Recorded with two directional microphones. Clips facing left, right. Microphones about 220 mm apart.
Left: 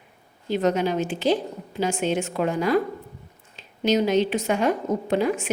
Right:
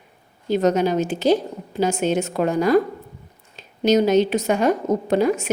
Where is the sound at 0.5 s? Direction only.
40° right (ahead or behind).